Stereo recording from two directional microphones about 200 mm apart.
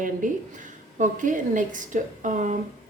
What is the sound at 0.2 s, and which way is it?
Speech, 40° right (ahead or behind).